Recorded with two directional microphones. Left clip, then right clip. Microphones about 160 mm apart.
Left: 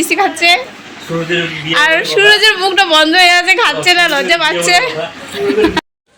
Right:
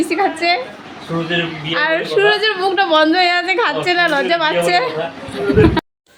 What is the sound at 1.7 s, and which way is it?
Speech, 5° left (ahead or behind).